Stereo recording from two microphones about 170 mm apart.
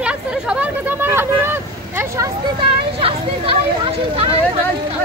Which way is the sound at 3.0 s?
35° right (ahead or behind).